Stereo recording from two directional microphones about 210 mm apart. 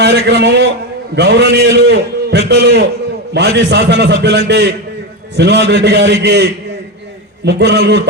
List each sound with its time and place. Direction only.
0.0 s a man's voice: 55° right (ahead or behind)